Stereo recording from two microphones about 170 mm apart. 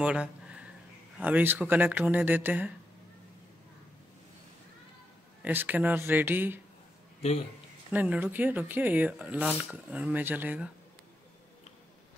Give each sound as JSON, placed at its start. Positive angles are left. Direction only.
{"t": 0.0, "sound": "a sound", "side_deg": -5}
{"t": 1.2, "sound": "speech", "side_deg": -10}
{"t": 5.4, "sound": "speech", "side_deg": -10}
{"t": 7.2, "sound": "a man's voice", "side_deg": 35}
{"t": 7.9, "sound": "speech", "side_deg": -10}